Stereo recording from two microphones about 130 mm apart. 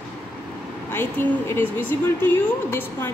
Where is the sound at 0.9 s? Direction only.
20° left (ahead or behind).